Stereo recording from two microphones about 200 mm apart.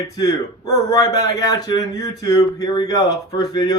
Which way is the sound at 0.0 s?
15° left (ahead or behind).